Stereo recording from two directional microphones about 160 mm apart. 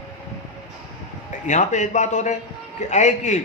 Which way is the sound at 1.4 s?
50° left (ahead or behind).